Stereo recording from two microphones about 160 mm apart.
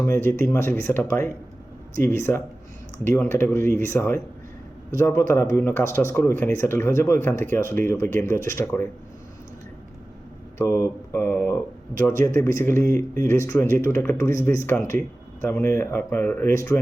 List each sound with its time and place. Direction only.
0.0 s speech: 15° left (ahead or behind)
10.6 s speech: 15° left (ahead or behind)